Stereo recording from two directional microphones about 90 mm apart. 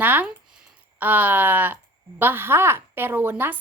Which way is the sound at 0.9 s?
20° right (ahead or behind).